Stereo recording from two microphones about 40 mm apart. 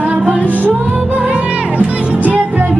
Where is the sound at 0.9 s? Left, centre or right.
Right.